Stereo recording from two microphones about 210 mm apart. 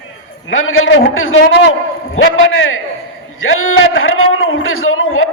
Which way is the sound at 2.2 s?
70° left (ahead or behind).